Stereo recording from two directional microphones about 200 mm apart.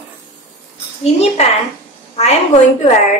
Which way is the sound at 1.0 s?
35° left (ahead or behind).